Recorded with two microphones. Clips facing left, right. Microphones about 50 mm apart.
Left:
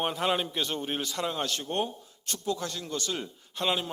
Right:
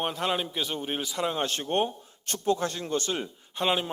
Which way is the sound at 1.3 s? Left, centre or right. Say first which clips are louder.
Right 3 dB; right.